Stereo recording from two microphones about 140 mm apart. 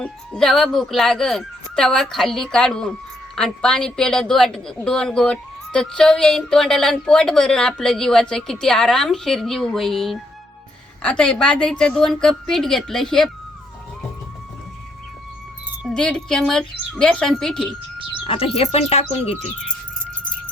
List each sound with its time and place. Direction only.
0.0 s a woman's voice: 5° left (ahead or behind)
16.0 s a woman's voice: 5° left (ahead or behind)
18.3 s speech: 40° left (ahead or behind)